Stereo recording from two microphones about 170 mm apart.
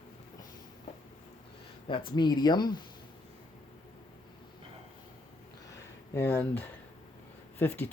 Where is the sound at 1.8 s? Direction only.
30° left (ahead or behind).